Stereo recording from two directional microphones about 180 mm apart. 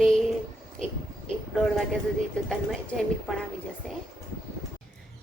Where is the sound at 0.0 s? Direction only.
Centre (ahead or behind).